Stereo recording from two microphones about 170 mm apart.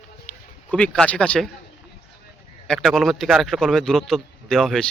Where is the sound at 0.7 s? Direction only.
10° left (ahead or behind).